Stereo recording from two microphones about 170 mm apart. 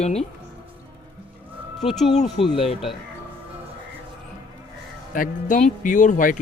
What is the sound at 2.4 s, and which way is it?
Speech, 35° left (ahead or behind).